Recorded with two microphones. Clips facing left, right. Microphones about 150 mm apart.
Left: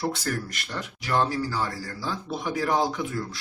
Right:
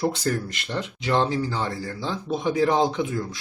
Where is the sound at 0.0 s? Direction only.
20° right (ahead or behind).